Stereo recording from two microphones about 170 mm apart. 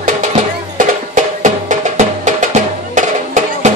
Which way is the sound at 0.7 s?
45° right (ahead or behind).